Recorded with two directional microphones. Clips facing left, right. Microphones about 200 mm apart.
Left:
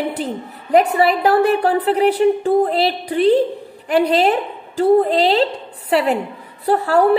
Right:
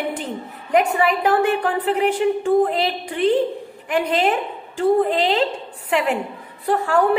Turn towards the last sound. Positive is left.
turn(degrees=35)  # may be behind; listen again after turning